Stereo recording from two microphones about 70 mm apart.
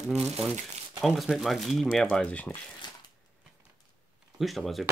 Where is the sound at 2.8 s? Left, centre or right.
Left.